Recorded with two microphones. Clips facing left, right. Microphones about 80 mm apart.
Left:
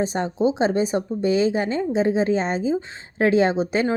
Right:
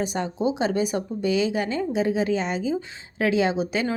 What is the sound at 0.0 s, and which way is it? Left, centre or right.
Speech, left.